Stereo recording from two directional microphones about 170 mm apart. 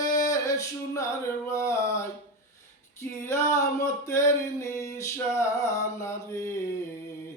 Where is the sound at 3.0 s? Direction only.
15° left (ahead or behind).